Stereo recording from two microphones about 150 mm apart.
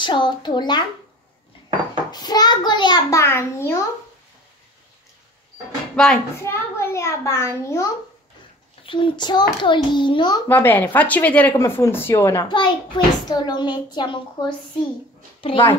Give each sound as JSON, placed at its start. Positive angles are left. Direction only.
{"t": 0.0, "sound": "a child's voice", "side_deg": 30}
{"t": 2.0, "sound": "a child's voice", "side_deg": 25}
{"t": 6.0, "sound": "speech", "side_deg": 5}
{"t": 6.4, "sound": "a child's voice", "side_deg": 15}
{"t": 8.8, "sound": "a child's voice", "side_deg": 35}
{"t": 10.5, "sound": "speech", "side_deg": 10}
{"t": 12.4, "sound": "a child's voice", "side_deg": 30}